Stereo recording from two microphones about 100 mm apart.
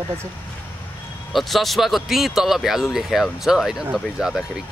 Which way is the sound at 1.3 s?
Centre (ahead or behind).